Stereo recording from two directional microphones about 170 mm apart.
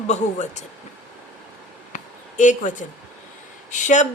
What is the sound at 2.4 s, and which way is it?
Speech, 45° left (ahead or behind).